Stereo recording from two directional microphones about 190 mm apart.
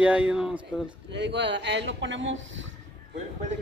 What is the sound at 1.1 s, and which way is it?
Speech, 65° right (ahead or behind).